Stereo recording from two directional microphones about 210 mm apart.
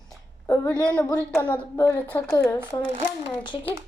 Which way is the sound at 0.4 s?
15° left (ahead or behind).